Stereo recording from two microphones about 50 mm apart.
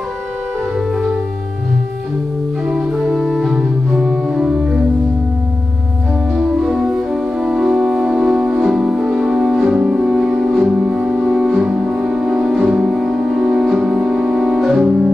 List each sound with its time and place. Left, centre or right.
2.7 s organ: centre
3.2 s music: centre
3.5 s music: centre
6.3 s music: centre